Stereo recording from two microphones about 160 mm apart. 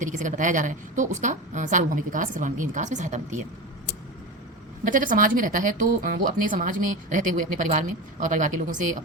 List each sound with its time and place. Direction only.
0.0 s a woman's voice: 50° right (ahead or behind)
4.9 s speech: 55° right (ahead or behind)